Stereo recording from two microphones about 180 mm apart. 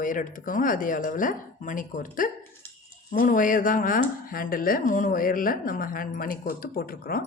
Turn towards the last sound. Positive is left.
turn(degrees=55)  # may be behind; listen again after turning